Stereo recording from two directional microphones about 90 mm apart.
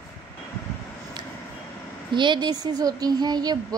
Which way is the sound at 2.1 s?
60° right (ahead or behind).